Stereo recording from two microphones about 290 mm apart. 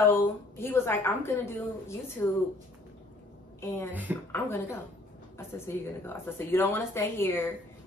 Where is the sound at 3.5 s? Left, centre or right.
Centre.